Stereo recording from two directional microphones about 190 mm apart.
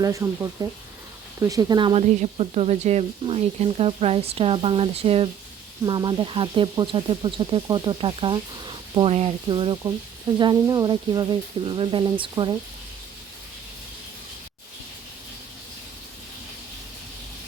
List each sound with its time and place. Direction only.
0.0 s speech: 15° right (ahead or behind)